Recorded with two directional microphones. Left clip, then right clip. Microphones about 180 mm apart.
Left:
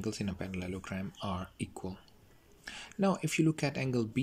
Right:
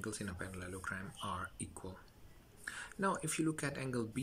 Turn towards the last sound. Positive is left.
turn(degrees=15)  # may be behind; listen again after turning